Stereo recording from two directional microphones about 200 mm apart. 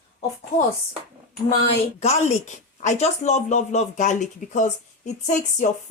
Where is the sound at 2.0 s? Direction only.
35° left (ahead or behind).